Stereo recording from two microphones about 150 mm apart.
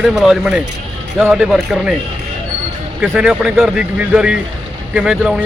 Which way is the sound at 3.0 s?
5° right (ahead or behind).